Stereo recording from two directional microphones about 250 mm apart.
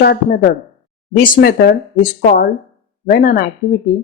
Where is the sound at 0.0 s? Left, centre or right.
Left.